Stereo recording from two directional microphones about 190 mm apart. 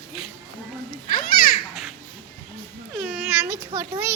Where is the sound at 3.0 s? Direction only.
5° right (ahead or behind).